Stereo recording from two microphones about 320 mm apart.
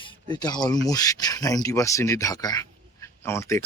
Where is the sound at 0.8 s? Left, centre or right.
Centre.